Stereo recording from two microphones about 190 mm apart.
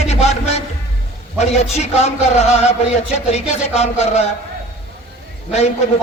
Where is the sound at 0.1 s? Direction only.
35° left (ahead or behind).